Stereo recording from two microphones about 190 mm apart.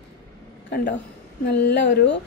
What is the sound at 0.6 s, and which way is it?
A woman's voice, 65° left (ahead or behind).